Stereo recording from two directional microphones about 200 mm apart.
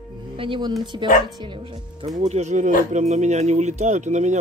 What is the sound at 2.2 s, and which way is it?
Speech, 35° right (ahead or behind).